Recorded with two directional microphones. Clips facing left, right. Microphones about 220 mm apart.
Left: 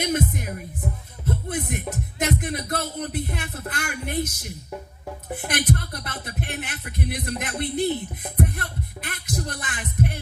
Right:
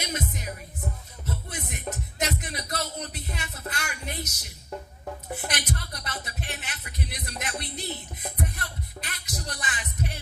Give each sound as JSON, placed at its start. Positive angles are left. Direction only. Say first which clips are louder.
{"t": 0.0, "sound": "music", "louder": "left 8 dB", "side_deg": 55}